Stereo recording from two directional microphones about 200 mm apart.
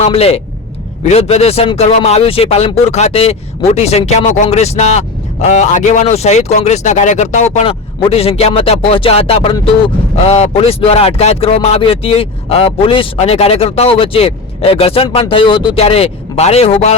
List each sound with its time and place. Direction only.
0.0 s speech: 30° left (ahead or behind)